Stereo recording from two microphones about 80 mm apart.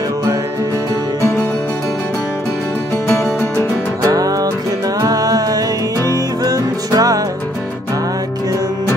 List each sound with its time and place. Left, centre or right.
4.0 s music: right